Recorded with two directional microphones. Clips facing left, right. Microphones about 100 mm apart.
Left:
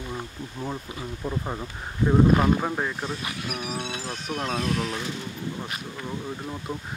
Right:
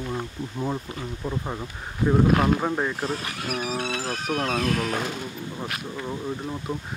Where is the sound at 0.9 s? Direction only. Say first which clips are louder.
Even; 5° left (ahead or behind).